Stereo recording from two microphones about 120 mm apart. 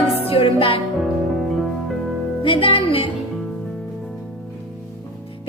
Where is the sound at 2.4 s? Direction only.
50° left (ahead or behind).